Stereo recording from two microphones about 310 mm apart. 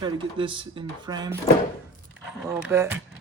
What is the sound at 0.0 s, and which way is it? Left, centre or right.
Speech, centre.